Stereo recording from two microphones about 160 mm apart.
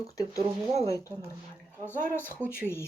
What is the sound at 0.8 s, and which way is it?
Speech, 20° left (ahead or behind).